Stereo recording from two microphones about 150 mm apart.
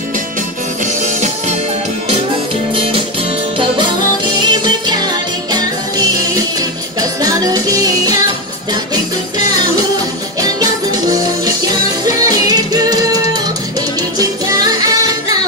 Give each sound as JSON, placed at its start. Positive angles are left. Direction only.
{"t": 1.0, "sound": "music", "side_deg": -55}
{"t": 4.4, "sound": "music", "side_deg": -30}
{"t": 10.4, "sound": "music", "side_deg": -25}